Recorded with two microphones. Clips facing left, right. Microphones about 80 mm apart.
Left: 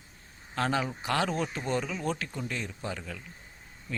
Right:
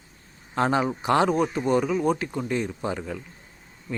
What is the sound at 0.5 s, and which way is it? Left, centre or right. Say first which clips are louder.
Speech: right 7 dB; right.